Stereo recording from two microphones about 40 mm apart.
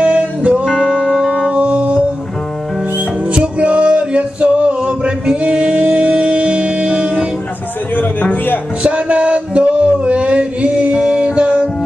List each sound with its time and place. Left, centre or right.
0.0 s music: right
0.7 s music: centre
1.6 s music: right
3.3 s music: right
7.9 s a sound: left
8.8 s a sound: right